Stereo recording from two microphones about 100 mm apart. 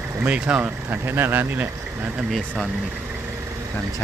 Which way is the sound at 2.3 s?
Centre (ahead or behind).